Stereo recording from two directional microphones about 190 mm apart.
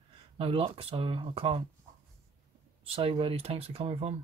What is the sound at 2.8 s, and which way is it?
Speech, 30° right (ahead or behind).